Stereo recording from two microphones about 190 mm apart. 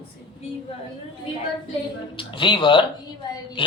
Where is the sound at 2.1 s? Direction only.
25° left (ahead or behind).